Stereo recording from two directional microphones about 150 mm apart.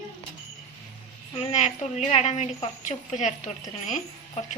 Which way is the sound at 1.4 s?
50° left (ahead or behind).